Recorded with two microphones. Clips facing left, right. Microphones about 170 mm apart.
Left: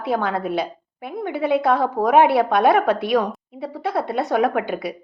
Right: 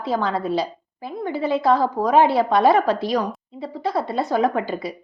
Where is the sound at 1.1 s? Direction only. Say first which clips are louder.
Left 2 dB; 60° left (ahead or behind).